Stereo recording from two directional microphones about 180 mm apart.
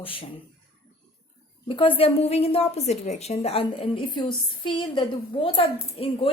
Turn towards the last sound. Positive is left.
turn(degrees=30)  # may be behind; listen again after turning